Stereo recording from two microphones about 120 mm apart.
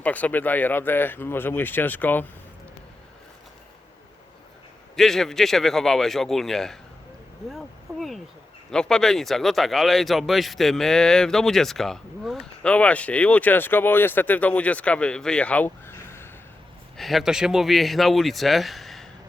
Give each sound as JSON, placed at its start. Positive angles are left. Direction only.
{"t": 0.0, "sound": "speech", "side_deg": 10}
{"t": 4.9, "sound": "speech", "side_deg": 5}
{"t": 7.5, "sound": "a sound", "side_deg": 0}
{"t": 8.7, "sound": "speech", "side_deg": 5}
{"t": 17.0, "sound": "speech", "side_deg": 0}